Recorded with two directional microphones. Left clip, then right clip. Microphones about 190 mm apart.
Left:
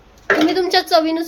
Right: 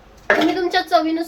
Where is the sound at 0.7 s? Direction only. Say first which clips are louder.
Left 2 dB; 50° left (ahead or behind).